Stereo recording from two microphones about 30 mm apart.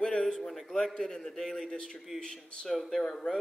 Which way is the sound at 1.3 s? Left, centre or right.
Centre.